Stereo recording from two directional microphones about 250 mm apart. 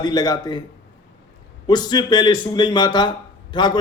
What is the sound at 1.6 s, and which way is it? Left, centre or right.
A man's voice, centre.